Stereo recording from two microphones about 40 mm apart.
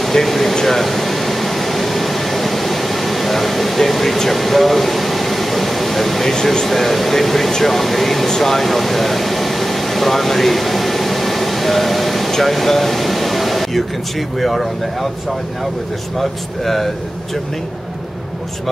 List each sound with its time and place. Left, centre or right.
0.0 s air conditioning: centre
6.3 s speech: centre
8.3 s air conditioning: centre
14.4 s speech: centre
16.2 s speech: centre